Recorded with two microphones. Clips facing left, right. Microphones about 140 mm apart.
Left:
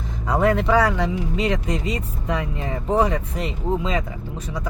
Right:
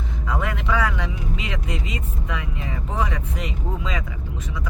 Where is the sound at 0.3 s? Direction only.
35° left (ahead or behind).